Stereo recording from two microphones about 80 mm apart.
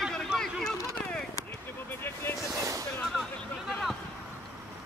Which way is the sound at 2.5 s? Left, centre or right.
Right.